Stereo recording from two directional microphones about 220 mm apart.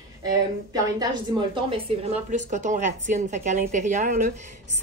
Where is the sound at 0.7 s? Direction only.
20° right (ahead or behind).